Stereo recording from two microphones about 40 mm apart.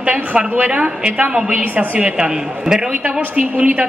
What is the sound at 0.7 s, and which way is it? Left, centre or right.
Speech, right.